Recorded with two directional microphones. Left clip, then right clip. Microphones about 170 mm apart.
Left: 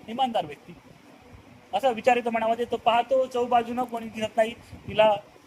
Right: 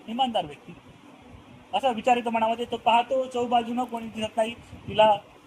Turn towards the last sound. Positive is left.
turn(degrees=25)  # may be behind; listen again after turning